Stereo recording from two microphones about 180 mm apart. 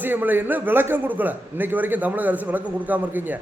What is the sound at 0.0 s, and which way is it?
A man's voice, 10° right (ahead or behind).